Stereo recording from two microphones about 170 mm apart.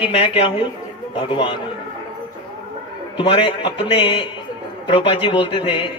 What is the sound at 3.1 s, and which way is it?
A man's voice, 30° left (ahead or behind).